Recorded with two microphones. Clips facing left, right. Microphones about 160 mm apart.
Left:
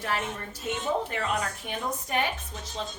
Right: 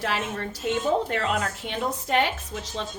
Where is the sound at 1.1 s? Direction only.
80° right.